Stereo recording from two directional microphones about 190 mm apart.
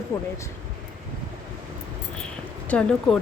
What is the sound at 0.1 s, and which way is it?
Speech, 15° left (ahead or behind).